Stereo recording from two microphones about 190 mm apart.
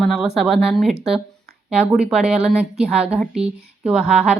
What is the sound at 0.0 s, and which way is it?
A woman's voice, centre (ahead or behind).